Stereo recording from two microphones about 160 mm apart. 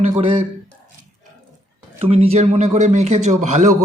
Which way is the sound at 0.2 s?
30° right (ahead or behind).